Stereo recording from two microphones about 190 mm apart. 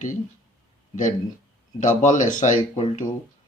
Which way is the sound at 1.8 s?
40° left (ahead or behind).